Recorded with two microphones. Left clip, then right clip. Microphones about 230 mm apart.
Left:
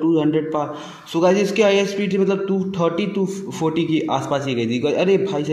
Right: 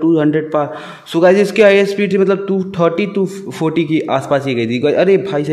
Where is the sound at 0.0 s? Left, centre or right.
Right.